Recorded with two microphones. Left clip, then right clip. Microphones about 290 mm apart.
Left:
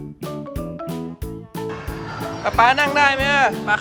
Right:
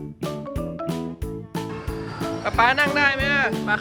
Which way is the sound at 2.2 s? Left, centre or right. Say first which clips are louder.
Left 4 dB; centre.